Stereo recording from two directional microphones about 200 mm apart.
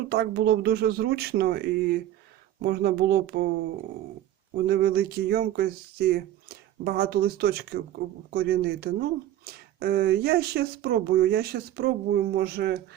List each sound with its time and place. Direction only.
0.1 s speech: 50° right (ahead or behind)
4.5 s speech: 50° right (ahead or behind)